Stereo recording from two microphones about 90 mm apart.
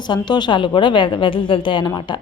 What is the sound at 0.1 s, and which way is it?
A woman's voice, 55° left (ahead or behind).